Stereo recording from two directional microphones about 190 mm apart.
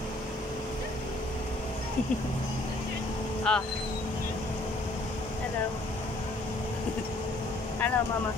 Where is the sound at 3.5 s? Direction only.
5° left (ahead or behind).